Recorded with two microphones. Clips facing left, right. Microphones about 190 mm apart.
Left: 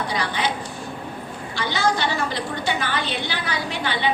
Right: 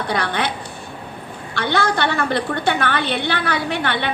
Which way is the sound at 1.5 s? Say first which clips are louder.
Right 3 dB; 60° right (ahead or behind).